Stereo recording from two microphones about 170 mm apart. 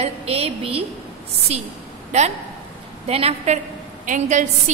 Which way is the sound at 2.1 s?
40° right (ahead or behind).